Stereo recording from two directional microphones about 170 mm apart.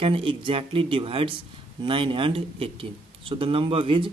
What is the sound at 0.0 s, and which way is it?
Speech, 30° right (ahead or behind).